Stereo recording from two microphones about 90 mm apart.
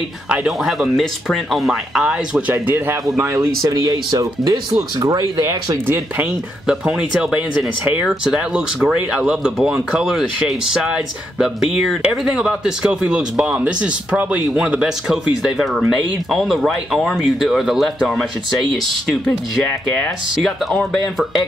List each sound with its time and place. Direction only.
0.5 s speech: centre (ahead or behind)
2.5 s speech: 25° right (ahead or behind)
3.1 s speech: 35° right (ahead or behind)
6.7 s speech: 10° right (ahead or behind)
15.0 s speech: 5° right (ahead or behind)